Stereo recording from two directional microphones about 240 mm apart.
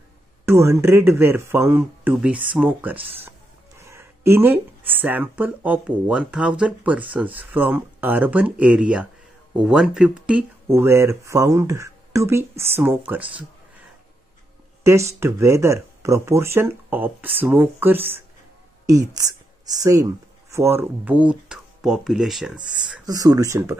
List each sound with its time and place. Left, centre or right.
0.5 s speech: centre
14.8 s a woman's voice: centre
23.0 s speech: centre